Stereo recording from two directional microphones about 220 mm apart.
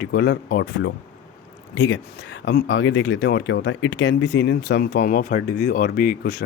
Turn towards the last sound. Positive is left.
turn(degrees=45)  # may be behind; listen again after turning